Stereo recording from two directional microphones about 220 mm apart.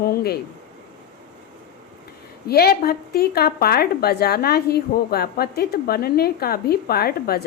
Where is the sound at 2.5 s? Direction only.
45° left (ahead or behind).